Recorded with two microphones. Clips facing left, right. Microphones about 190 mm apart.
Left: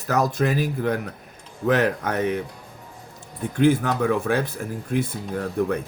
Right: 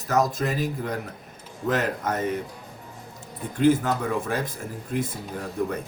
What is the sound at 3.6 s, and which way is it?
Speech, 70° left (ahead or behind).